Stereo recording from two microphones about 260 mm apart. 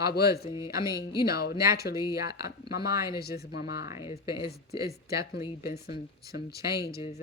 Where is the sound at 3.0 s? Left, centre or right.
Left.